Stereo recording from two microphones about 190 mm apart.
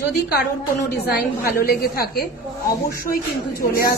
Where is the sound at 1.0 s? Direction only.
55° left (ahead or behind).